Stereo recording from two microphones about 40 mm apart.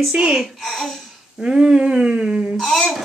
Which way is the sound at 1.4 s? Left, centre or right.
Right.